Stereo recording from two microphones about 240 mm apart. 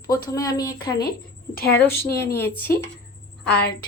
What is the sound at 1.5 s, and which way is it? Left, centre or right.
A woman's voice, left.